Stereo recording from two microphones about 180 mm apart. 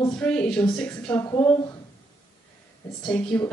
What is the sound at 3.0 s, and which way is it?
Speech, 5° left (ahead or behind).